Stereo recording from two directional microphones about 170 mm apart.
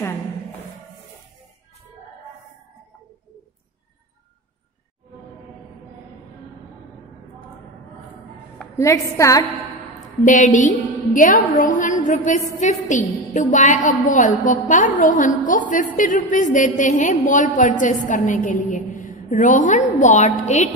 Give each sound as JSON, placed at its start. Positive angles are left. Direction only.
{"t": 8.5, "sound": "a woman's voice", "side_deg": 15}
{"t": 10.2, "sound": "a woman's voice", "side_deg": 45}